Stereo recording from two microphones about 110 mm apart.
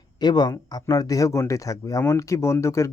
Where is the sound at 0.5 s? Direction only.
35° left (ahead or behind).